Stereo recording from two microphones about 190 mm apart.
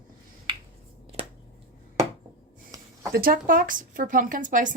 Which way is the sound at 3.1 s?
50° right (ahead or behind).